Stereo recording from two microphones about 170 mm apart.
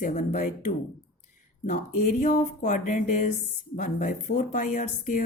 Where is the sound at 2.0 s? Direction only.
50° left (ahead or behind).